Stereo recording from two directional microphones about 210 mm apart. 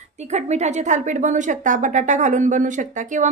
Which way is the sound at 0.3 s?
35° right (ahead or behind).